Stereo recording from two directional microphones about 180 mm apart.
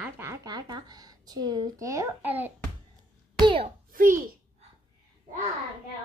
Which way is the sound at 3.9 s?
50° right (ahead or behind).